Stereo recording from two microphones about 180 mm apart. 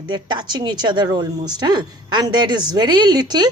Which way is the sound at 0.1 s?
25° right (ahead or behind).